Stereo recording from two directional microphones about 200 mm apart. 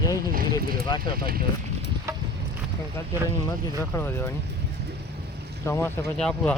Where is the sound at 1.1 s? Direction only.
50° right (ahead or behind).